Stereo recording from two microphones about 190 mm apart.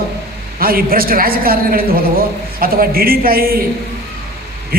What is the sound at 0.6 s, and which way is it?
A man's voice, 50° right (ahead or behind).